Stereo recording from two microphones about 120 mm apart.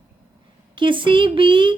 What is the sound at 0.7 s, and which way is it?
A woman's voice, 45° right (ahead or behind).